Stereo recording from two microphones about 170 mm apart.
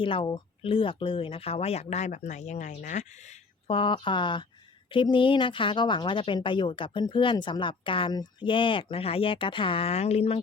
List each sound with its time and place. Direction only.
0.0 s speech: 30° left (ahead or behind)
3.7 s speech: 30° left (ahead or behind)